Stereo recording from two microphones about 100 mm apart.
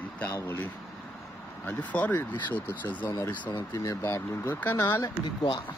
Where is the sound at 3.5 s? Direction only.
35° left (ahead or behind).